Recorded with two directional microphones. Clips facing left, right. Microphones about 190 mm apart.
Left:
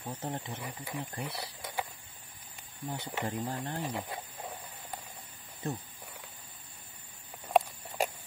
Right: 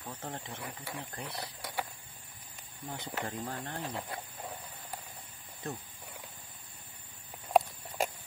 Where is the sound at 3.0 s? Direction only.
10° left (ahead or behind).